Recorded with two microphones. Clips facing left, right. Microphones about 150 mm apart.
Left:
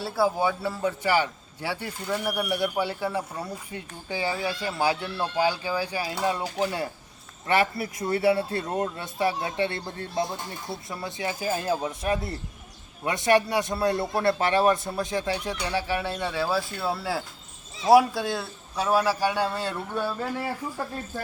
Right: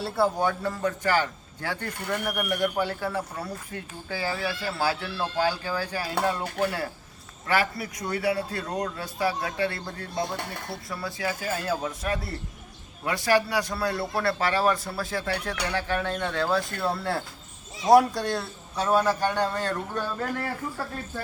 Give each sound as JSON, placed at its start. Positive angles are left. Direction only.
{"t": 0.0, "sound": "speech", "side_deg": 0}
{"t": 7.4, "sound": "a man's voice", "side_deg": 25}
{"t": 10.3, "sound": "speech", "side_deg": -70}
{"t": 10.8, "sound": "a man's voice", "side_deg": 20}